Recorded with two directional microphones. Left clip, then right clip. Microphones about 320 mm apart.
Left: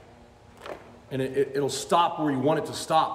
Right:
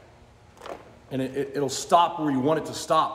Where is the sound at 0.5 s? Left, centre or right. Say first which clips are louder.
Right 1 dB; centre.